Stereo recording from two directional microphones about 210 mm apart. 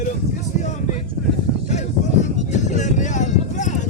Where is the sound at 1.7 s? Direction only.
35° left (ahead or behind).